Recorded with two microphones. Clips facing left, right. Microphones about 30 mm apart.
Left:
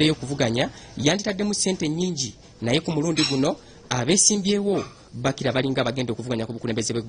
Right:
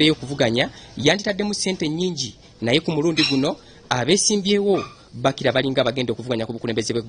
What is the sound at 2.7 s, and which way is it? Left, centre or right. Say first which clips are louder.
A man's voice: right 4 dB; right.